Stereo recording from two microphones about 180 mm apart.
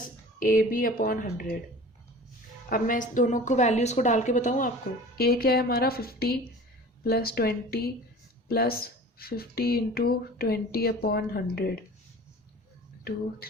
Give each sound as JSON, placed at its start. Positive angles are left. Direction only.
{"t": 0.3, "sound": "a woman's voice", "side_deg": 50}
{"t": 2.6, "sound": "a woman's voice", "side_deg": 50}
{"t": 5.1, "sound": "speech", "side_deg": 55}